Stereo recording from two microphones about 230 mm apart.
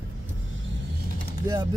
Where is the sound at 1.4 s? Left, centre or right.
Centre.